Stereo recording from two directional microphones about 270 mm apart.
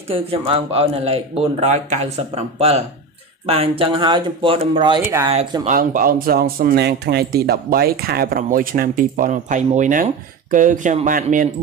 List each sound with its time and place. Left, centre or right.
0.1 s speech: right
5.3 s speech: right